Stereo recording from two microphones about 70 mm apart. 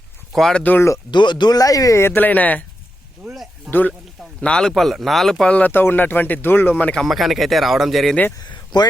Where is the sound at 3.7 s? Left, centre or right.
Left.